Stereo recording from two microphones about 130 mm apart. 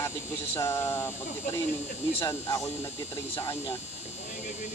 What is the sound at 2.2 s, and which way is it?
Speech, 25° left (ahead or behind).